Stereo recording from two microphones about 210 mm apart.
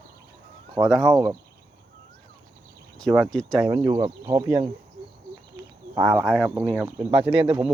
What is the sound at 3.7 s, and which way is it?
Speech, 15° right (ahead or behind).